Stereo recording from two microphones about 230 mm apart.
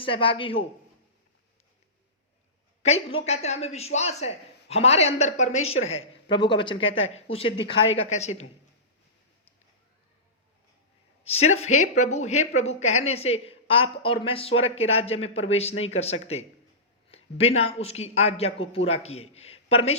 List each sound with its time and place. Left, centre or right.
0.0 s speech: left
2.8 s speech: left
5.6 s speech: left
6.0 s speech: left
11.2 s speech: left
17.1 s a sound: left
17.6 s speech: left